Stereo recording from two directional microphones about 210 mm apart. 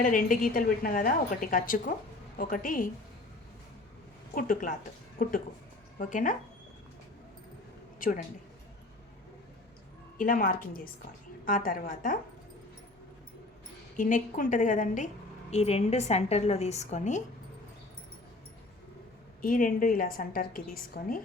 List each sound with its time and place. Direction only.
0.0 s a woman's voice: 40° left (ahead or behind)
4.4 s a woman's voice: 40° left (ahead or behind)
7.9 s a woman's voice: 40° left (ahead or behind)
10.2 s a woman's voice: 40° left (ahead or behind)
13.9 s a woman's voice: 40° left (ahead or behind)
19.4 s a woman's voice: 40° left (ahead or behind)